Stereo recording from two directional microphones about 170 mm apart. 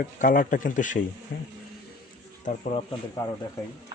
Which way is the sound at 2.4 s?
50° left (ahead or behind).